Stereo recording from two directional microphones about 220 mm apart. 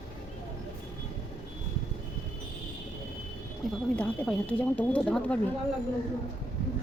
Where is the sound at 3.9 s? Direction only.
5° left (ahead or behind).